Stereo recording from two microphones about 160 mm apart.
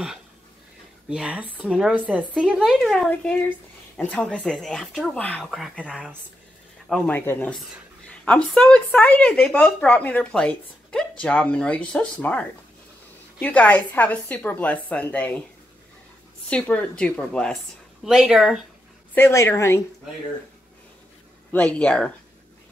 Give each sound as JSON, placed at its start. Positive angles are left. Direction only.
{"t": 1.0, "sound": "speech", "side_deg": -5}
{"t": 7.1, "sound": "speech", "side_deg": 10}
{"t": 16.4, "sound": "speech", "side_deg": 10}
{"t": 19.1, "sound": "speech", "side_deg": 15}
{"t": 21.5, "sound": "speech", "side_deg": 10}